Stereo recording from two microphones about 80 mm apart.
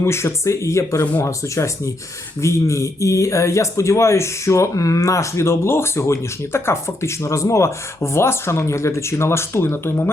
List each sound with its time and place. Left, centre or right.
0.0 s speech: left